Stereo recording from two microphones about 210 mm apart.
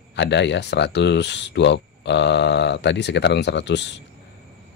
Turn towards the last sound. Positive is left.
turn(degrees=55)  # may be behind; listen again after turning